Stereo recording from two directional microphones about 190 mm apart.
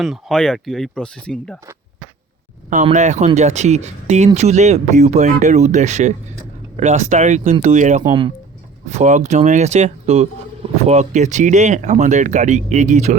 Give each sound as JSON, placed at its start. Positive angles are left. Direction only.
{"t": 0.0, "sound": "speech", "side_deg": 0}
{"t": 2.8, "sound": "speech", "side_deg": -40}
{"t": 8.0, "sound": "speech", "side_deg": -25}
{"t": 8.9, "sound": "speech", "side_deg": -40}